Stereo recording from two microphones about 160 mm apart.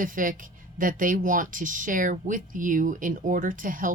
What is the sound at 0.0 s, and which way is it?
Speech, 60° right (ahead or behind).